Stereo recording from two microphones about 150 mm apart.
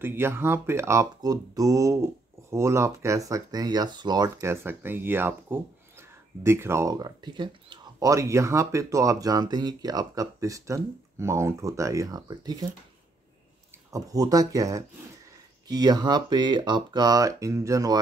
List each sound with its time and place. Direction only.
0.0 s speech: 15° right (ahead or behind)
13.8 s speech: 25° right (ahead or behind)